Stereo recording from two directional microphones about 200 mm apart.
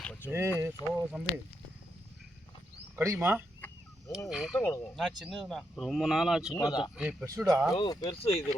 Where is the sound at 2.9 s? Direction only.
10° right (ahead or behind).